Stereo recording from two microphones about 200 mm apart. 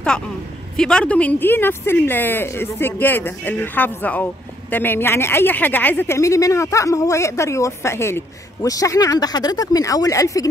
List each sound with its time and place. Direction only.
0.7 s speech: 5° left (ahead or behind)